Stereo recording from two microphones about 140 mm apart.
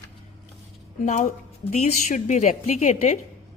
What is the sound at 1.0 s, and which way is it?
A woman's voice, 60° left (ahead or behind).